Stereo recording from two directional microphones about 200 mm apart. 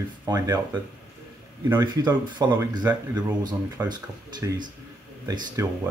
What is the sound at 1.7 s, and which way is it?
A man's voice, 20° right (ahead or behind).